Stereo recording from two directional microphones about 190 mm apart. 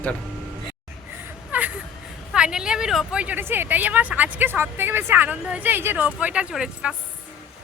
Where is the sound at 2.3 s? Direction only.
5° right (ahead or behind).